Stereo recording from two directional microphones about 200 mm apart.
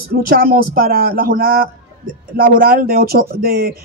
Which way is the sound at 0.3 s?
45° right (ahead or behind).